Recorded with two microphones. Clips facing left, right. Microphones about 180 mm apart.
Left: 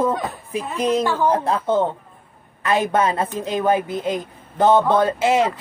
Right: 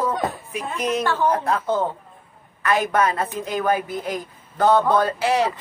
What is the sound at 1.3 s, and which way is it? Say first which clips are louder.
A woman's voice: left 3 dB; 25° left (ahead or behind).